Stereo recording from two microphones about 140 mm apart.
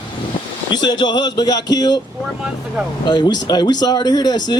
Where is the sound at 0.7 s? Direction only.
30° left (ahead or behind).